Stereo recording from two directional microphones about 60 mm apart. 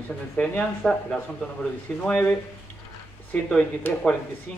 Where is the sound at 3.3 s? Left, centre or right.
Left.